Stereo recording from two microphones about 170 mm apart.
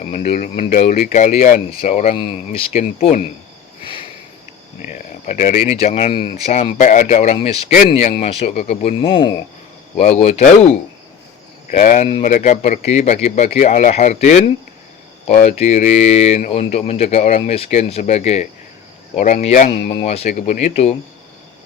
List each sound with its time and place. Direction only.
0.0 s speech: 40° left (ahead or behind)
4.9 s speech: 45° left (ahead or behind)
9.0 s speech: 30° left (ahead or behind)
10.0 s speech: 45° left (ahead or behind)